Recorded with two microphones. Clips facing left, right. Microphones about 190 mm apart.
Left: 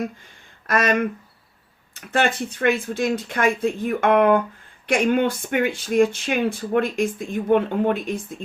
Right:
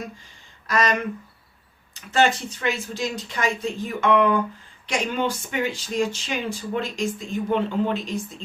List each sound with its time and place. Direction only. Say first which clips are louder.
0.7 s speech: left 3 dB; 55° left (ahead or behind)